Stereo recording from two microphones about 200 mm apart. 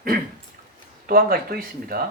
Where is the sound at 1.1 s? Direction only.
45° right (ahead or behind).